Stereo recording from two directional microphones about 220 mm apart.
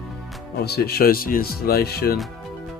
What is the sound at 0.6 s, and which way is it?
Speech, 45° left (ahead or behind).